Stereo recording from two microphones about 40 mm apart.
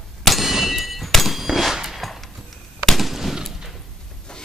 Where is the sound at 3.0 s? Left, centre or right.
Centre.